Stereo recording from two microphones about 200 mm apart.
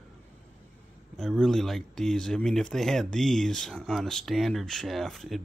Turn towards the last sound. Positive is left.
turn(degrees=0)  # may be behind; listen again after turning